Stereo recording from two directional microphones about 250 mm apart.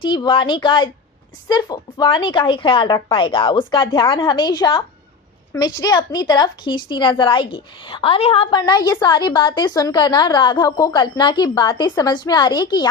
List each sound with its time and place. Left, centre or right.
0.0 s a woman's voice: centre